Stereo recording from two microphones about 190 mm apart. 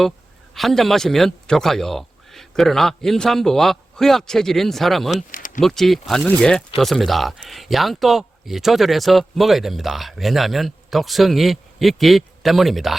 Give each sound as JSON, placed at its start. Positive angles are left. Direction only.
{"t": 0.5, "sound": "speech", "side_deg": 0}
{"t": 5.1, "sound": "speech", "side_deg": 45}
{"t": 5.5, "sound": "speech", "side_deg": 0}